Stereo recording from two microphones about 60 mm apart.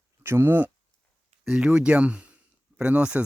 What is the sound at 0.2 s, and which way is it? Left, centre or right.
Speech, right.